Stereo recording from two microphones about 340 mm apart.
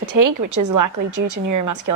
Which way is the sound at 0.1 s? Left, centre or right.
Right.